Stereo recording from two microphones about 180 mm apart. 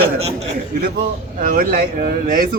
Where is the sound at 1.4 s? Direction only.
50° right (ahead or behind).